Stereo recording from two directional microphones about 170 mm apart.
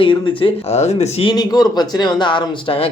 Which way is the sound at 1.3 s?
25° left (ahead or behind).